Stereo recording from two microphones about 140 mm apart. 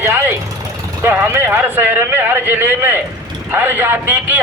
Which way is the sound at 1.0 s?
15° right (ahead or behind).